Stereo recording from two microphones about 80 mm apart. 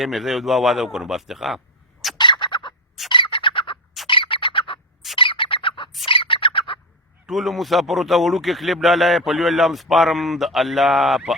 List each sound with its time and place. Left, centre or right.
0.0 s a man's voice: centre
2.1 s bird: left
6.1 s a sound: left
7.3 s a man's voice: centre